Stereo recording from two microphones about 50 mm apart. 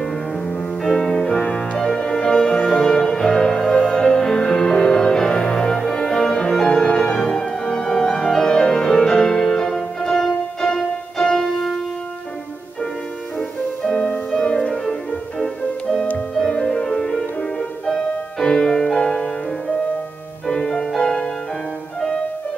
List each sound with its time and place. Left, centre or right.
0.0 s music: centre
1.8 s music: centre
13.4 s music: centre
20.4 s music: centre